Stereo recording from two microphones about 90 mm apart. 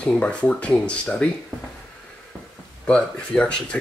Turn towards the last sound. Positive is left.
turn(degrees=15)  # may be behind; listen again after turning